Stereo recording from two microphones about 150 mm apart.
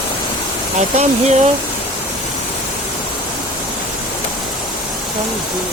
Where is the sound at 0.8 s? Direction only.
50° right (ahead or behind).